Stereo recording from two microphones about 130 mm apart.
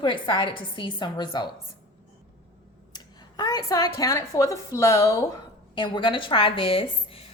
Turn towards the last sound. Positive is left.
turn(degrees=45)  # may be behind; listen again after turning